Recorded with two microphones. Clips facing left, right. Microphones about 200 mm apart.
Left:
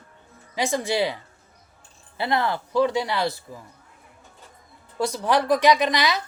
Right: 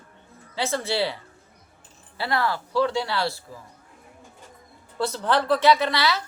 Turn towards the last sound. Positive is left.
turn(degrees=15)  # may be behind; listen again after turning